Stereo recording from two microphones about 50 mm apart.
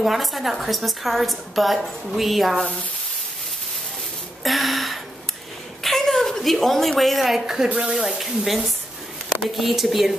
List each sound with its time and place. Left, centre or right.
0.0 s a woman's voice: centre
4.4 s gasp: centre
5.9 s a woman's voice: centre